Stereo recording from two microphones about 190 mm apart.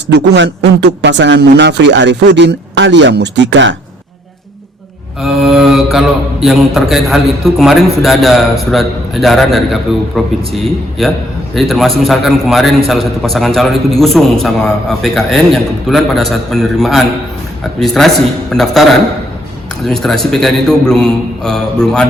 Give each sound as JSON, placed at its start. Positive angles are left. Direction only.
{"t": 0.1, "sound": "a man's voice", "side_deg": -65}
{"t": 5.2, "sound": "a man's voice", "side_deg": 0}